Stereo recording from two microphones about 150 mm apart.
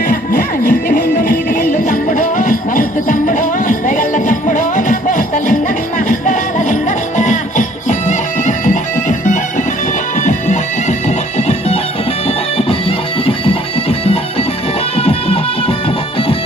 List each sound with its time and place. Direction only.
0.1 s music: 65° left (ahead or behind); by 11.8 s 45° left (ahead or behind)
13.2 s music: 40° left (ahead or behind)